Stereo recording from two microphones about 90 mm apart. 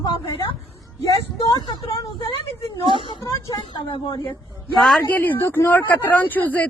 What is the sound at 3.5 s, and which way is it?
Speech, 55° left (ahead or behind).